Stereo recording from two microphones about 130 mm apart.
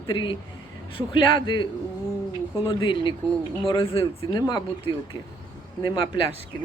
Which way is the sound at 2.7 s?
40° left (ahead or behind).